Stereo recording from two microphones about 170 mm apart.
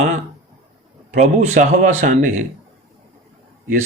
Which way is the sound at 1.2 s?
45° right (ahead or behind).